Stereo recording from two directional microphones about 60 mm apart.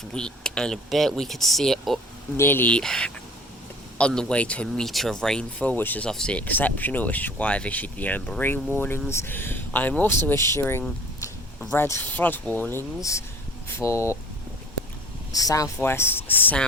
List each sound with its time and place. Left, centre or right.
0.1 s speech: centre
2.4 s speech: left
2.8 s speech: centre
4.8 s speech: centre
5.7 s speech: left
6.0 s speech: centre
6.4 s speech: left
10.1 s speech: left
12.0 s speech: left
13.0 s speech: left
15.3 s speech: left
15.8 s speech: left